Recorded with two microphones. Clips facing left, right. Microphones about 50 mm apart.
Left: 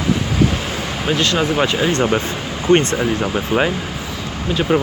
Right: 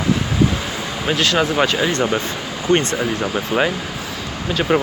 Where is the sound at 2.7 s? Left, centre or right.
Left.